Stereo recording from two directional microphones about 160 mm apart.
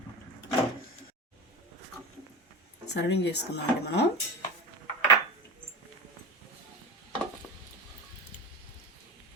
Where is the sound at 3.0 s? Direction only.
90° left.